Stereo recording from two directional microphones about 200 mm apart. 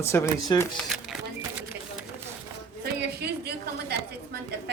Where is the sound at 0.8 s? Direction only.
5° right (ahead or behind).